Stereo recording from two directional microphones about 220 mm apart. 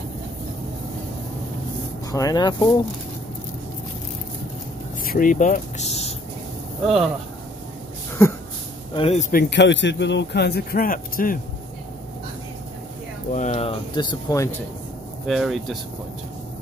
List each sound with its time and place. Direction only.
2.0 s speech: 15° left (ahead or behind)
5.0 s speech: 40° left (ahead or behind)
8.2 s speech: 10° left (ahead or behind)
8.9 s speech: 25° left (ahead or behind)
9.3 s speech: 50° left (ahead or behind)
13.3 s speech: 30° left (ahead or behind)
15.2 s speech: centre (ahead or behind)